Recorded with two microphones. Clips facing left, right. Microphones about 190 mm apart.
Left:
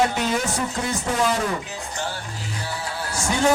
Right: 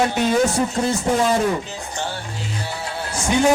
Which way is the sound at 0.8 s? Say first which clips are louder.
Right 6 dB; 30° right (ahead or behind).